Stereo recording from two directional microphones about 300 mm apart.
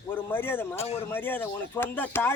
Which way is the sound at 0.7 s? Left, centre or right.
Centre.